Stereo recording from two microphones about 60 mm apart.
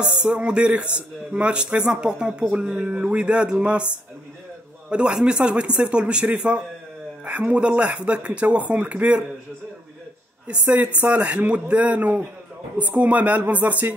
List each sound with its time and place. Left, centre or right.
0.2 s speech: centre
10.4 s speech: centre